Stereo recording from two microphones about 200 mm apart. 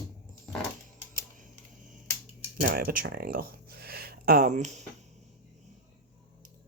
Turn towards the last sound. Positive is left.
turn(degrees=-35)  # may be behind; listen again after turning